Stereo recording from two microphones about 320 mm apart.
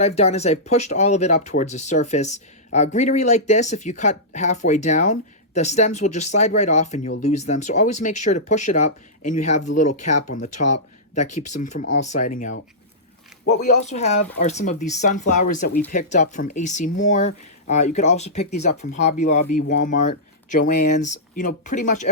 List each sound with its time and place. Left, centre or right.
0.0 s speech: centre
13.7 s speech: left